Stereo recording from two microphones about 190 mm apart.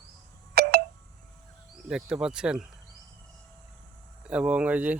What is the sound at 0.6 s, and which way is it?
Telephone dialing, 55° right (ahead or behind).